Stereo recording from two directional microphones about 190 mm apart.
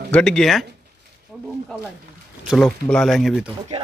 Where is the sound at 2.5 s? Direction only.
Centre (ahead or behind).